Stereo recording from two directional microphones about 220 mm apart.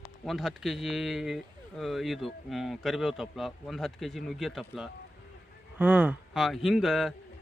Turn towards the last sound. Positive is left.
turn(degrees=0)  # may be behind; listen again after turning